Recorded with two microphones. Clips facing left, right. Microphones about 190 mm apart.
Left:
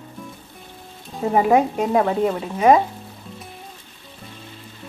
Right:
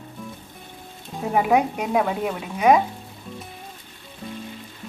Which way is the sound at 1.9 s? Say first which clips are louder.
Left 4 dB; 5° right (ahead or behind).